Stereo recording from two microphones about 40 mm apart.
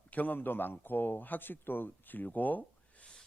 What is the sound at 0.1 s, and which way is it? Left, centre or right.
A man's voice, left.